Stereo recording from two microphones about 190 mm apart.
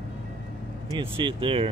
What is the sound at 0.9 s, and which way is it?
Speech, 25° right (ahead or behind).